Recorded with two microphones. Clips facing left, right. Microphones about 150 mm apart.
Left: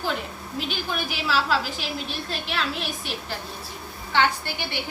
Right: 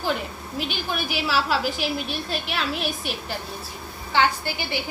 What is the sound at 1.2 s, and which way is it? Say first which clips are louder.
A woman's voice: even; 10° right (ahead or behind).